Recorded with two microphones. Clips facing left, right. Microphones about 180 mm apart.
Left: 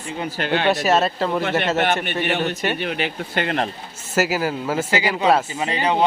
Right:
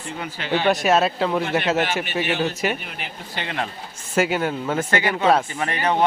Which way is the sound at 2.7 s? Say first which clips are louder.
Left 10 dB; 80° left.